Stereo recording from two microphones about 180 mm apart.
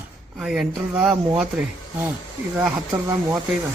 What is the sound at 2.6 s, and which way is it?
Speech, 15° right (ahead or behind).